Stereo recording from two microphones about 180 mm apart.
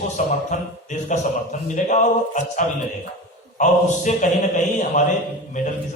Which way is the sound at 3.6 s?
45° left (ahead or behind).